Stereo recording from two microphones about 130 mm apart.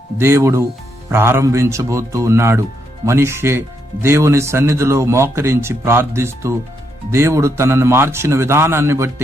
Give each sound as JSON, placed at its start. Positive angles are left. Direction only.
{"t": 0.2, "sound": "speech", "side_deg": -20}